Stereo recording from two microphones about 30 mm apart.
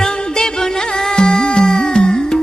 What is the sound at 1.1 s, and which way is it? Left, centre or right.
Music, left.